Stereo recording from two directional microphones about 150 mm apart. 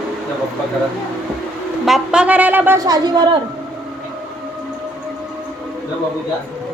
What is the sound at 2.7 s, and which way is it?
Speech, 25° right (ahead or behind).